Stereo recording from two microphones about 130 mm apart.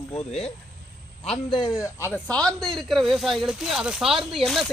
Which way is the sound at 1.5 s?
35° left (ahead or behind).